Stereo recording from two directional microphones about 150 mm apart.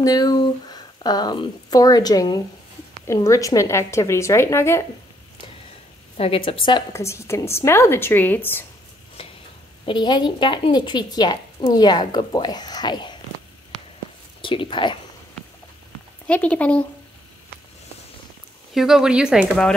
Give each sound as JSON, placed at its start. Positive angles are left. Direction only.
{"t": 0.0, "sound": "a woman's voice", "side_deg": 25}
{"t": 6.1, "sound": "a woman's voice", "side_deg": 40}
{"t": 6.9, "sound": "a woman's voice", "side_deg": 20}
{"t": 9.8, "sound": "a woman's voice", "side_deg": 30}
{"t": 14.4, "sound": "speech", "side_deg": 35}
{"t": 16.3, "sound": "a woman's voice", "side_deg": 10}
{"t": 18.7, "sound": "speech", "side_deg": 0}